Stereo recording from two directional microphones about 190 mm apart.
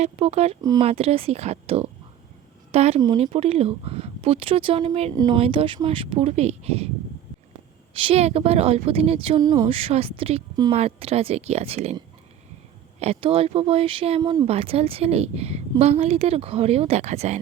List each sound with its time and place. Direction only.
0.0 s speech: 35° right (ahead or behind)
0.6 s speech: 20° right (ahead or behind)
0.9 s speech: 30° right (ahead or behind)
7.9 s speech: 30° right (ahead or behind)
13.0 s speech: 30° right (ahead or behind)